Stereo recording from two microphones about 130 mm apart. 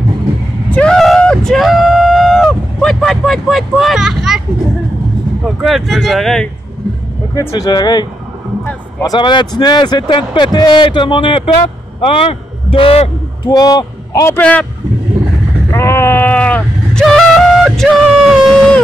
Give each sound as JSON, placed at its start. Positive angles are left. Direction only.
{"t": 0.7, "sound": "a sound", "side_deg": 10}
{"t": 5.4, "sound": "speech", "side_deg": 0}
{"t": 7.3, "sound": "a man's voice", "side_deg": 30}
{"t": 13.5, "sound": "a man's voice", "side_deg": 30}
{"t": 14.3, "sound": "a man's voice", "side_deg": 10}
{"t": 15.7, "sound": "sheep", "side_deg": 20}
{"t": 17.0, "sound": "a sound", "side_deg": 5}